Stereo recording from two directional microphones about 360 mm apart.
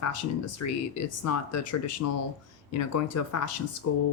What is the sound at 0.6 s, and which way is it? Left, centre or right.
Speech, left.